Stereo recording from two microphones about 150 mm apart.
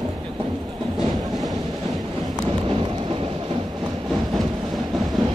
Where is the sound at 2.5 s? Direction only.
35° right (ahead or behind).